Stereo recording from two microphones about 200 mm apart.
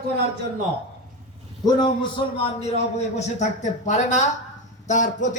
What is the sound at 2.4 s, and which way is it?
A man's voice, 35° left (ahead or behind).